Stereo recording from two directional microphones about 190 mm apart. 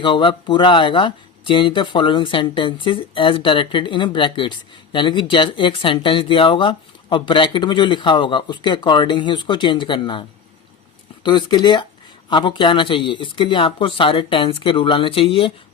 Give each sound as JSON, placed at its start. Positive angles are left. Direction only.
{"t": 0.0, "sound": "speech", "side_deg": 25}